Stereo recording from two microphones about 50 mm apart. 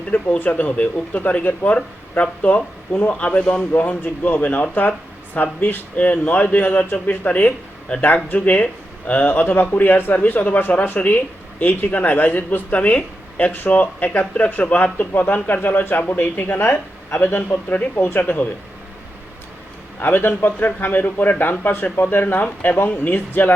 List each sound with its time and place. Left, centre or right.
0.1 s a man's voice: left
13.5 s speech: left
14.9 s speech: left
18.2 s speech: left
20.0 s speech: left